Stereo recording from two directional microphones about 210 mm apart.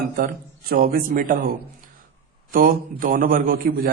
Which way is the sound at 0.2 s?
45° right (ahead or behind).